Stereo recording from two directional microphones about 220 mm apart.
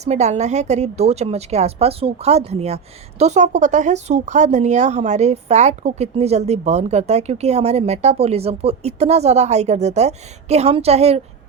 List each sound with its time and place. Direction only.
0.0 s a woman's voice: 30° right (ahead or behind)